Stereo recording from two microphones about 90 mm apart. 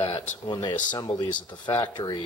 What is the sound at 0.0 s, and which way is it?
Speech, 90° left.